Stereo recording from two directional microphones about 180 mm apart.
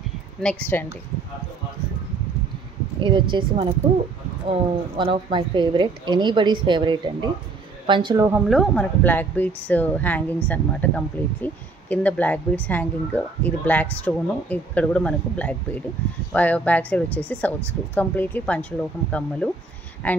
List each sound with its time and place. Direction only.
0.4 s speech: 10° left (ahead or behind)
3.0 s a woman's voice: 25° right (ahead or behind)
8.3 s speech: centre (ahead or behind)